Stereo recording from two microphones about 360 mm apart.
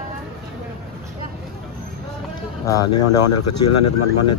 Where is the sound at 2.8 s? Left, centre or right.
Left.